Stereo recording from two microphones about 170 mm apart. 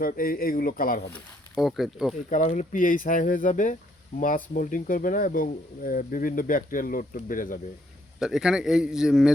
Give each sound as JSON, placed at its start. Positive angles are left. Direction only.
{"t": 0.0, "sound": "speech", "side_deg": 60}
{"t": 1.5, "sound": "speech", "side_deg": 0}
{"t": 2.3, "sound": "speech", "side_deg": 45}
{"t": 8.2, "sound": "speech", "side_deg": -5}